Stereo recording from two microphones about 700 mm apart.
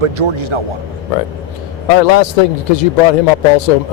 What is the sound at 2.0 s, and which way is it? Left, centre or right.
Speech, left.